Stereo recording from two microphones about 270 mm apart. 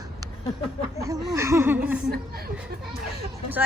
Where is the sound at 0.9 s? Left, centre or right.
Centre.